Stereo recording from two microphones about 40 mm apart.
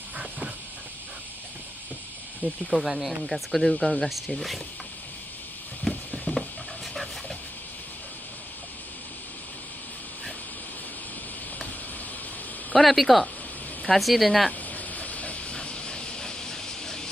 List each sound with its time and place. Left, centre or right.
2.4 s speech: right
2.8 s speech: centre
5.9 s a sound: centre
12.7 s speech: centre
14.7 s a sound: left
15.5 s steam: left